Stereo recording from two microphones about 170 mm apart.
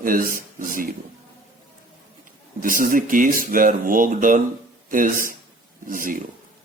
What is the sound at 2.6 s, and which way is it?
Speech, 55° right (ahead or behind).